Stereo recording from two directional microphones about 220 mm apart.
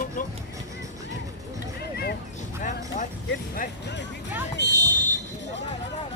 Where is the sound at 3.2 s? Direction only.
45° left (ahead or behind).